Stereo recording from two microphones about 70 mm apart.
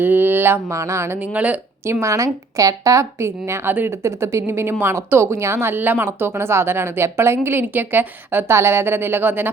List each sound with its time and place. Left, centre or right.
0.0 s a sound: right
0.7 s a woman's voice: right
1.3 s speech: right
1.9 s a woman's voice: right
3.7 s speech: right
4.0 s a woman's voice: right